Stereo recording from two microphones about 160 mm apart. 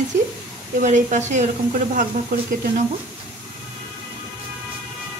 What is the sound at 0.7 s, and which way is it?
Speech, 50° right (ahead or behind).